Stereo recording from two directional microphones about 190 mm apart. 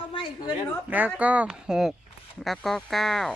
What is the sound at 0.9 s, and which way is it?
A man's voice, 10° right (ahead or behind).